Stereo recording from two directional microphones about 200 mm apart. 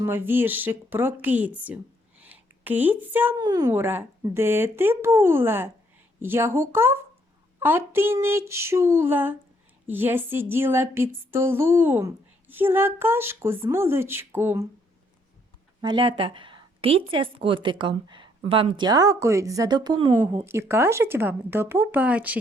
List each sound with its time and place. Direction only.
0.0 s speech: 10° right (ahead or behind)
15.8 s a woman's voice: 25° right (ahead or behind); by 22.4 s 5° right (ahead or behind)